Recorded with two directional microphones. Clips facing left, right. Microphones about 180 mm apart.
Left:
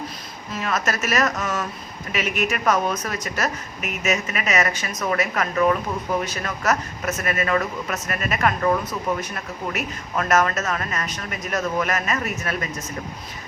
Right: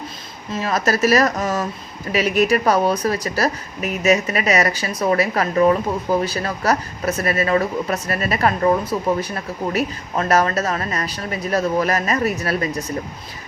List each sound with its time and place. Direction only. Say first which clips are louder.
0.5 s speech: right 5 dB; 35° right (ahead or behind)